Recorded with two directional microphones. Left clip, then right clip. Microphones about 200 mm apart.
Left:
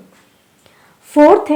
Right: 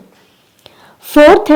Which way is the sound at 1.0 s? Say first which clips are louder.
Right 3 dB; 40° right (ahead or behind).